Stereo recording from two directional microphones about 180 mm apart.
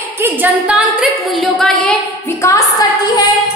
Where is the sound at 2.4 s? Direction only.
20° left (ahead or behind).